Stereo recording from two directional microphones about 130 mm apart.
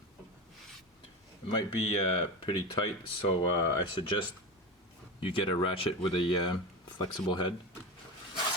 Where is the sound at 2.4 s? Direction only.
35° left (ahead or behind).